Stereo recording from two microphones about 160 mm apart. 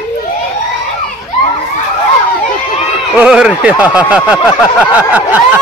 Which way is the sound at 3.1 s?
5° right (ahead or behind).